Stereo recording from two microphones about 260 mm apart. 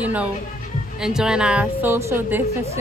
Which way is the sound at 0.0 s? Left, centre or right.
Centre.